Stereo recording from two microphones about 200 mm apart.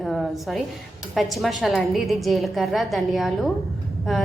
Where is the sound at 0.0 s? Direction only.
Centre (ahead or behind).